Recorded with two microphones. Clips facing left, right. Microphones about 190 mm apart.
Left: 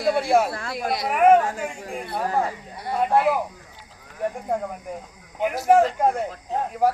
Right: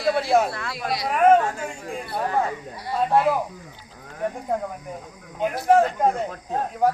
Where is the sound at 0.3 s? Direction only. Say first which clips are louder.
Even; 10° left (ahead or behind).